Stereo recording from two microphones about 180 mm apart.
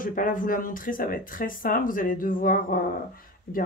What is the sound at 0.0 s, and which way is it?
Speech, 50° left (ahead or behind).